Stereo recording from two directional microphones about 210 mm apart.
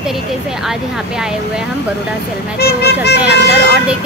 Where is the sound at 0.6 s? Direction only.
Centre (ahead or behind).